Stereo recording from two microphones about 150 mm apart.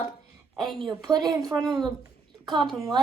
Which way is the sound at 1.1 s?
25° right (ahead or behind).